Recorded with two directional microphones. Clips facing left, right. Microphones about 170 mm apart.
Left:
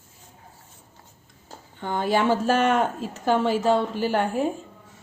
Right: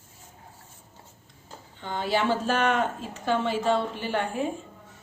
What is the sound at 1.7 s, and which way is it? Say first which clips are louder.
A woman's voice: left 4 dB; 50° left (ahead or behind).